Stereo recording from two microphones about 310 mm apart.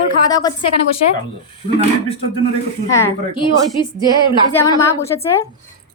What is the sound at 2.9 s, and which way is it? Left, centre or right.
Speech, centre.